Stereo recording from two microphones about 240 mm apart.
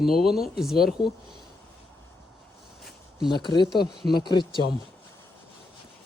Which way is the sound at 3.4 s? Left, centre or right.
Centre.